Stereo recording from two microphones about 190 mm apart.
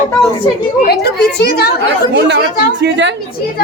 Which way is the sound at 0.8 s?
60° left (ahead or behind).